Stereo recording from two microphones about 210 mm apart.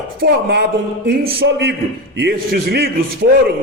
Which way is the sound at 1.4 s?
55° right (ahead or behind).